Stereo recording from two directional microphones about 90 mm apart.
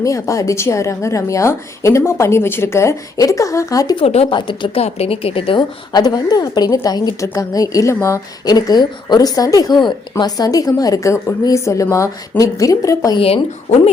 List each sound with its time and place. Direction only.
0.0 s a woman's voice: 35° left (ahead or behind)
3.9 s speech: 70° left (ahead or behind)
5.9 s a woman's voice: 45° left (ahead or behind)
13.1 s speech: 90° left